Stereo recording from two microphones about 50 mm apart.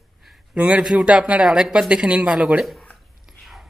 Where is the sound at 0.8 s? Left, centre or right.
Centre.